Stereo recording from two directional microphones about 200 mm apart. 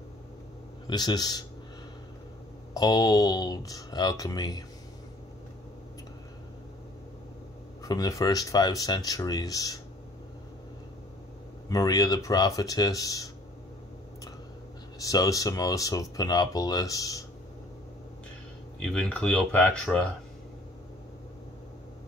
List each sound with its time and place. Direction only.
0.8 s speech: 20° left (ahead or behind)
2.7 s speech: 20° left (ahead or behind)
7.8 s speech: 20° left (ahead or behind)
11.7 s speech: 15° left (ahead or behind)
15.0 s speech: 15° left (ahead or behind)
18.8 s speech: 5° left (ahead or behind)